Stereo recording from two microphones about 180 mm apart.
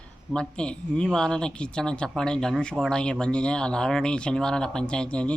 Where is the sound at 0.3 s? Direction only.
5° left (ahead or behind).